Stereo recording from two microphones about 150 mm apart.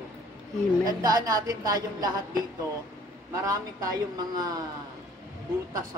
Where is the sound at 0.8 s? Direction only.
25° right (ahead or behind).